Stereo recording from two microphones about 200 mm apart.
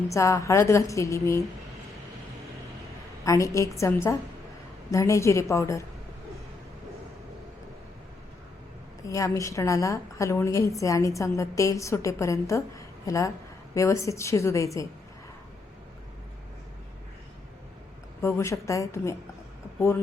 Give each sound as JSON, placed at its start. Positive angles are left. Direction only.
{"t": 0.1, "sound": "a woman's voice", "side_deg": 15}
{"t": 3.2, "sound": "a woman's voice", "side_deg": 15}
{"t": 9.0, "sound": "a woman's voice", "side_deg": 15}
{"t": 18.2, "sound": "a woman's voice", "side_deg": 15}